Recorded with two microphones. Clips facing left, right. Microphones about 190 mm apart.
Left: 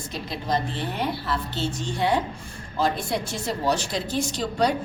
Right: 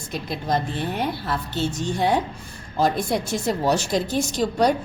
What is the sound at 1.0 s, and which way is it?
A woman's voice, 45° right (ahead or behind).